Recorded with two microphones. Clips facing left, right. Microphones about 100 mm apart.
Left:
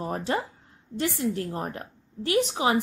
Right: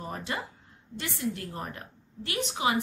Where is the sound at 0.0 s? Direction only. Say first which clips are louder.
Left 7 dB; 40° left (ahead or behind).